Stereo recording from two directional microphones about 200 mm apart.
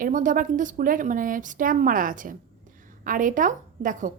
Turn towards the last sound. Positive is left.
turn(degrees=-40)  # may be behind; listen again after turning